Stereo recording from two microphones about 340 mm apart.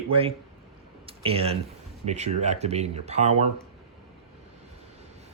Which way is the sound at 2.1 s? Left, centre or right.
Centre.